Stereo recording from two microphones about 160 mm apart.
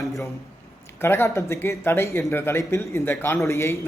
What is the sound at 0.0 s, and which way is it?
Speech, centre (ahead or behind).